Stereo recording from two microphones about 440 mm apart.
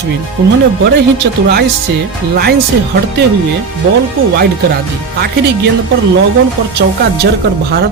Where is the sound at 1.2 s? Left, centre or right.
Right.